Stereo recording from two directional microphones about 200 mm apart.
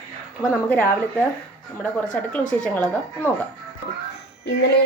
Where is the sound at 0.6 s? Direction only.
10° left (ahead or behind).